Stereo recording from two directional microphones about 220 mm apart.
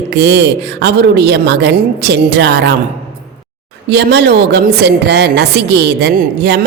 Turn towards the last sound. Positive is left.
turn(degrees=-50)  # may be behind; listen again after turning